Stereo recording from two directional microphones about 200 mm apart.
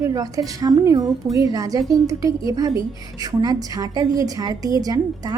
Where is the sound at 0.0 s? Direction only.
15° right (ahead or behind).